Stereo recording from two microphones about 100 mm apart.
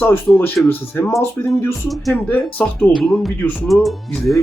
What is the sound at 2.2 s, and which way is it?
Speech, 15° left (ahead or behind).